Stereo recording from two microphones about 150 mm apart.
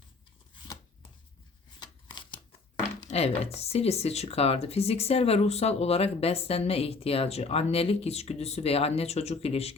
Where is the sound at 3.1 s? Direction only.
45° left (ahead or behind).